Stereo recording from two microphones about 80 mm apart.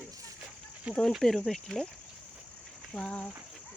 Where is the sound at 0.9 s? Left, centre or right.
Centre.